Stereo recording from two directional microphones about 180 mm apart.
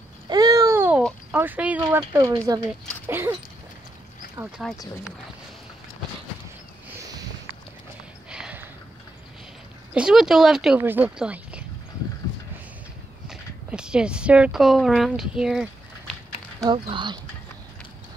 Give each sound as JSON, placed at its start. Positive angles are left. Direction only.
{"t": 0.3, "sound": "babbling", "side_deg": -20}
{"t": 1.3, "sound": "speech", "side_deg": -10}
{"t": 4.5, "sound": "speech", "side_deg": 0}
{"t": 8.3, "sound": "a sound", "side_deg": -5}
{"t": 9.9, "sound": "speech", "side_deg": -5}
{"t": 13.3, "sound": "speech", "side_deg": -5}
{"t": 16.5, "sound": "speech", "side_deg": -25}